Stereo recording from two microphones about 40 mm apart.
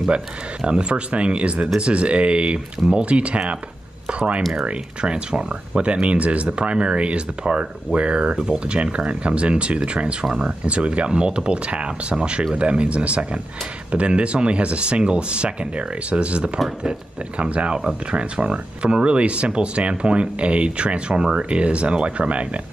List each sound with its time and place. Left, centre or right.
0.1 s speech: right
4.1 s a sound: right
4.6 s speech: right